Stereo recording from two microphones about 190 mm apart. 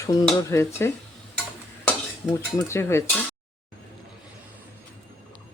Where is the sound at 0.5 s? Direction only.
15° left (ahead or behind).